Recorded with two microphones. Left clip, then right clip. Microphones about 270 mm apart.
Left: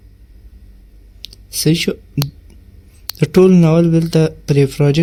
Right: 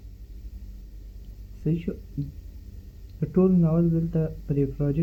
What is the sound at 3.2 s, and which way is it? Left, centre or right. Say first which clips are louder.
Speech: left 13 dB; left.